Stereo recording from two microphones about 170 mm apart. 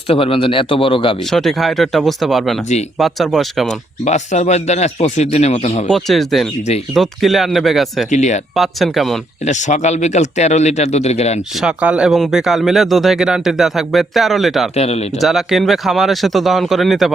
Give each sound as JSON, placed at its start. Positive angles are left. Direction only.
{"t": 0.1, "sound": "speech", "side_deg": 35}
{"t": 1.3, "sound": "speech", "side_deg": 0}
{"t": 4.0, "sound": "speech", "side_deg": 45}
{"t": 5.9, "sound": "speech", "side_deg": 0}
{"t": 8.1, "sound": "speech", "side_deg": 45}
{"t": 8.5, "sound": "speech", "side_deg": 0}
{"t": 9.4, "sound": "speech", "side_deg": 45}
{"t": 11.6, "sound": "speech", "side_deg": -5}
{"t": 14.8, "sound": "speech", "side_deg": 40}
{"t": 15.2, "sound": "speech", "side_deg": 0}